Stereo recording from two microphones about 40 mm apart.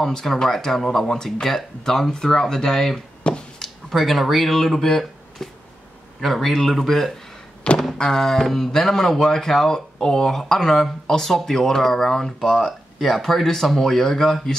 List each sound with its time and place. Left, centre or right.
0.1 s speech: centre
3.3 s finger snapping: left
3.6 s speech: centre
7.7 s thunk: left
8.0 s speech: centre